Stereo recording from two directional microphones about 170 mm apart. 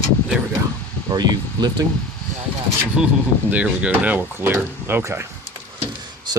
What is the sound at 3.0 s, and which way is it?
Speech, 5° right (ahead or behind).